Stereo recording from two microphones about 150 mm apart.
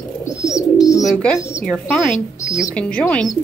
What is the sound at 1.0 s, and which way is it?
Bird, 5° left (ahead or behind).